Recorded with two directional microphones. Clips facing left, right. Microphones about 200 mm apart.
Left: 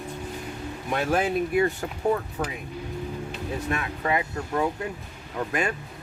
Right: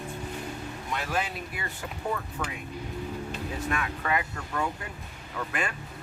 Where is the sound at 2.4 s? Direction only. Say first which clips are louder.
Left 5 dB; 35° left (ahead or behind).